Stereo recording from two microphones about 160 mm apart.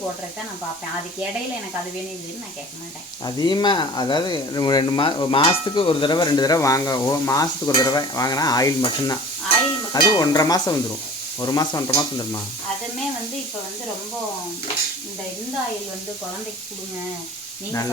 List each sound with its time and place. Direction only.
3.2 s speech: 25° left (ahead or behind)